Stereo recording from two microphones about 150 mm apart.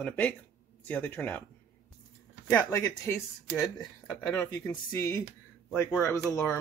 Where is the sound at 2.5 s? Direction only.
20° left (ahead or behind).